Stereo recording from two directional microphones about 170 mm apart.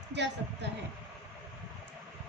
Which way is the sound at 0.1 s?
90° right.